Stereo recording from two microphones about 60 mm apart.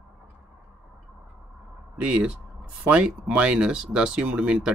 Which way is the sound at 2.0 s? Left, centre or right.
Right.